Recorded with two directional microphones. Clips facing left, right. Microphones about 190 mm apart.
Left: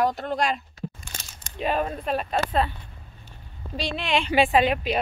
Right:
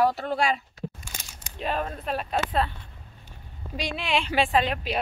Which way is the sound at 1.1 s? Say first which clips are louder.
Left 1 dB; 10° right (ahead or behind).